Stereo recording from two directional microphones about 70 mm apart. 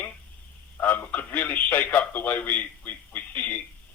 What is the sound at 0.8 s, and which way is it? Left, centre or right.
A man's voice, left.